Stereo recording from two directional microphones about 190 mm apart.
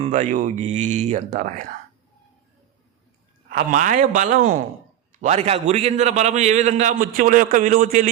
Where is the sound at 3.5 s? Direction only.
50° right (ahead or behind).